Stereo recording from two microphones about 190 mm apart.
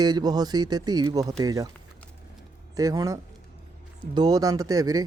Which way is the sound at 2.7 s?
20° right (ahead or behind).